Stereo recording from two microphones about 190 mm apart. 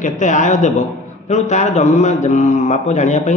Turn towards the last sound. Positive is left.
turn(degrees=40)  # may be behind; listen again after turning